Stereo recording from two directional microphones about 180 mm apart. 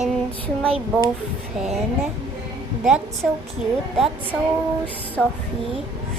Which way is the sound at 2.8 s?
Centre (ahead or behind).